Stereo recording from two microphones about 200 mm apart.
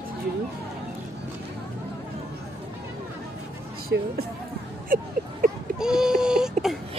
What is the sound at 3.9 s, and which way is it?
Speech, 55° right (ahead or behind).